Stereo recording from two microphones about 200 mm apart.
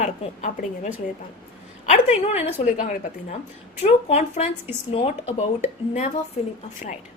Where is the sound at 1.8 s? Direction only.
35° left (ahead or behind).